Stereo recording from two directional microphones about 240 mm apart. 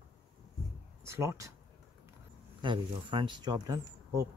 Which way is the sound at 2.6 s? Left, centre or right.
Centre.